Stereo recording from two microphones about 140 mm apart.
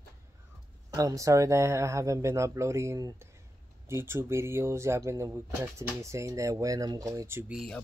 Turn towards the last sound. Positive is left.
turn(degrees=-20)  # may be behind; listen again after turning